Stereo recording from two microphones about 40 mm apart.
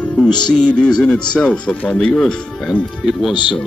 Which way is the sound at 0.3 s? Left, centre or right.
Left.